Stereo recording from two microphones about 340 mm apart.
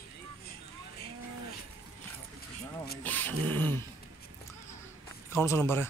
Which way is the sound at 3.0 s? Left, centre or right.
Centre.